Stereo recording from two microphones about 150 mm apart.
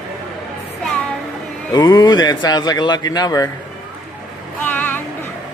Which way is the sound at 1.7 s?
25° left (ahead or behind).